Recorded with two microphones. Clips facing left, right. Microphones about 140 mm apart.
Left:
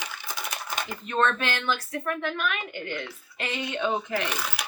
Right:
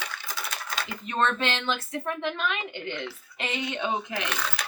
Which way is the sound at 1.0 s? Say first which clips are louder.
Left 1 dB; 20° right (ahead or behind).